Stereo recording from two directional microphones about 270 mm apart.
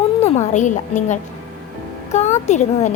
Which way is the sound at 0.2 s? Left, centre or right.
Left.